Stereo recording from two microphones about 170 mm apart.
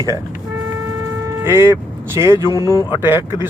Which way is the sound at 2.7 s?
20° left (ahead or behind).